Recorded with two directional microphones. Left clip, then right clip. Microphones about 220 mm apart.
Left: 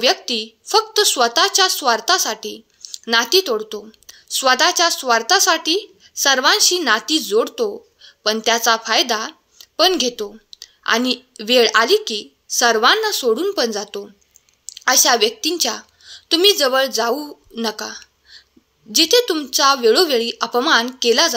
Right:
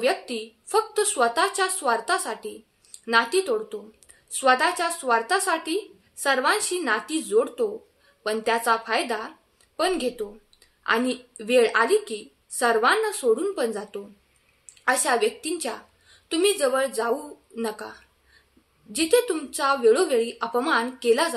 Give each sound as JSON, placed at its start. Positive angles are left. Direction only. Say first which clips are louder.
{"t": 0.0, "sound": "a woman's voice", "louder": "left 7 dB", "side_deg": 40}